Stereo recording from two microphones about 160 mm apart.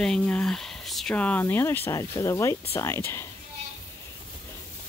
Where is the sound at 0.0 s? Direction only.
5° left (ahead or behind).